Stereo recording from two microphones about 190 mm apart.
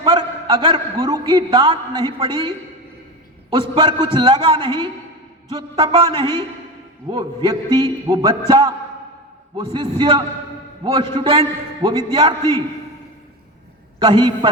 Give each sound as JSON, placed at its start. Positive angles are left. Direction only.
{"t": 0.0, "sound": "a man's voice", "side_deg": -25}
{"t": 3.5, "sound": "a man's voice", "side_deg": -25}
{"t": 14.0, "sound": "a man's voice", "side_deg": -25}